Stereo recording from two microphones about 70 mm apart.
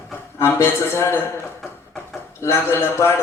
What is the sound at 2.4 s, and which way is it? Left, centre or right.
Speech, left.